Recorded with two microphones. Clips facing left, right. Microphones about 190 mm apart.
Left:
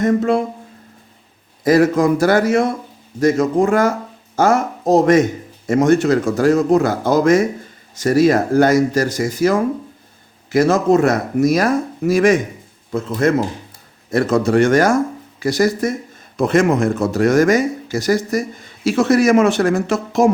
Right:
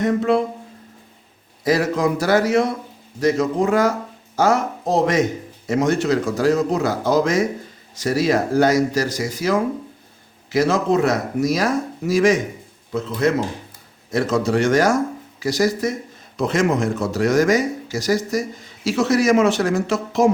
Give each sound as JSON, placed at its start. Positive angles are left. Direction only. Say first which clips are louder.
{"t": 0.0, "sound": "speech", "louder": "left 3 dB", "side_deg": 45}
{"t": 1.6, "sound": "speech", "louder": "left 5 dB", "side_deg": 50}